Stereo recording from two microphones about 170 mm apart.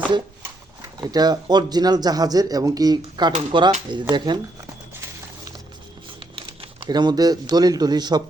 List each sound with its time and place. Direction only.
0.8 s speech: 25° right (ahead or behind)
6.3 s speech: 30° right (ahead or behind)